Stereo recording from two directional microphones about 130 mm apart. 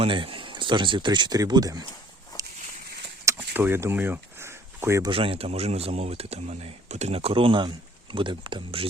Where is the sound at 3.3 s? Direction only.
15° right (ahead or behind).